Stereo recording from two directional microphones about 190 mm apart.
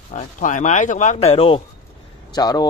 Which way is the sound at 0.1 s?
40° left (ahead or behind).